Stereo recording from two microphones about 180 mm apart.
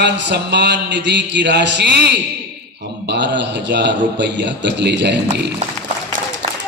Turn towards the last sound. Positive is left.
turn(degrees=-70)  # may be behind; listen again after turning